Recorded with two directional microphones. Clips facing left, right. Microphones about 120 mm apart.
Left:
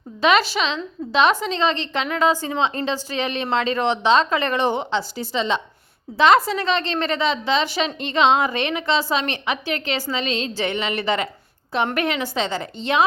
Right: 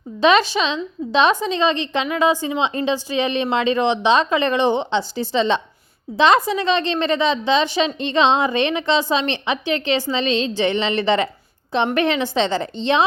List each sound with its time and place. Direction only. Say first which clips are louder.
0.2 s a woman's voice: right 3 dB; 25° right (ahead or behind)